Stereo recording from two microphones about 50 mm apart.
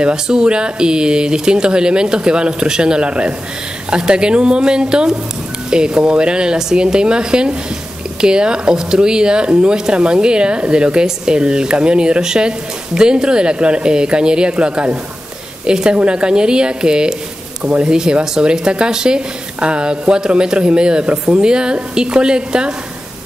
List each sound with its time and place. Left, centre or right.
0.0 s speech: centre